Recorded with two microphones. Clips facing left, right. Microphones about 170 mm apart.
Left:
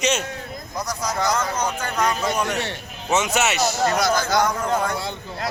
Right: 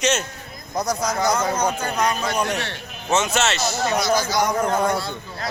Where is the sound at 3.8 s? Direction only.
50° left (ahead or behind).